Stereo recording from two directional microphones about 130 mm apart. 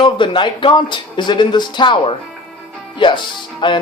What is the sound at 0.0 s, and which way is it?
Speech, 40° left (ahead or behind).